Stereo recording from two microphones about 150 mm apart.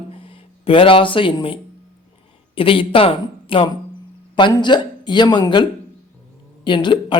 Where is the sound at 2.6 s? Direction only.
35° left (ahead or behind).